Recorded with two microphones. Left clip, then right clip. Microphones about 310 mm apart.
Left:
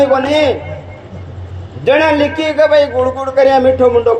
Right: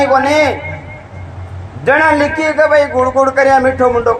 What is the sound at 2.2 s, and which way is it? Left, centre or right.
A man's voice, centre.